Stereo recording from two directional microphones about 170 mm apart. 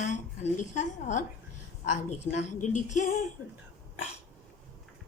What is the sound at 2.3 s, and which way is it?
Speech, 45° left (ahead or behind).